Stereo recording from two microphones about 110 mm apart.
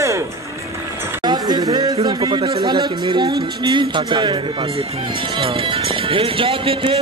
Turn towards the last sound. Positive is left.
turn(degrees=-55)  # may be behind; listen again after turning